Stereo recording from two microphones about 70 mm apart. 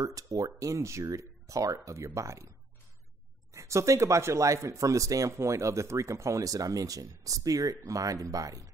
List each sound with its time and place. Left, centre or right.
0.0 s speech: right
3.5 s speech: right